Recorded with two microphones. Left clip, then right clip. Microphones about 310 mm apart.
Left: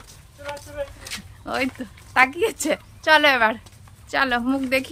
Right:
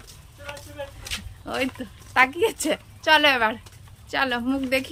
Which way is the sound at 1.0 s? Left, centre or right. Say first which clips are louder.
Even; centre.